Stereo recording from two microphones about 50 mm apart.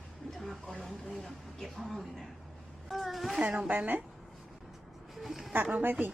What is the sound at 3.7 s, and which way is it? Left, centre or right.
Speech, right.